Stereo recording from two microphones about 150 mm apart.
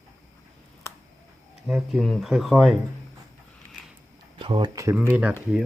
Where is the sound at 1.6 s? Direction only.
Centre (ahead or behind).